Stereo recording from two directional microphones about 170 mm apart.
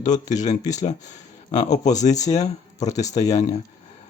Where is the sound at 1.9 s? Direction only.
45° left (ahead or behind).